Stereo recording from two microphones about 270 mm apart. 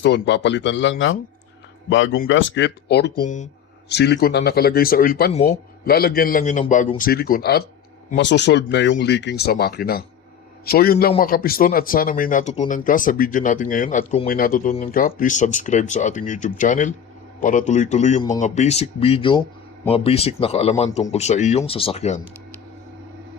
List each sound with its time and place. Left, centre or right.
0.0 s speech: left